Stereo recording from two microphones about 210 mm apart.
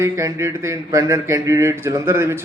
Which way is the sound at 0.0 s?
15° right (ahead or behind).